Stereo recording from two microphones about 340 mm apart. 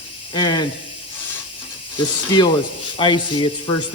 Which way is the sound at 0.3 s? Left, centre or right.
Centre.